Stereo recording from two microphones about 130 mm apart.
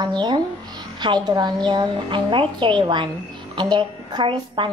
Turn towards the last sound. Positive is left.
turn(degrees=-40)  # may be behind; listen again after turning